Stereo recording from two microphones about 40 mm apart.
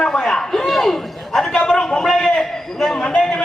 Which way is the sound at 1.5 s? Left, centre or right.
Centre.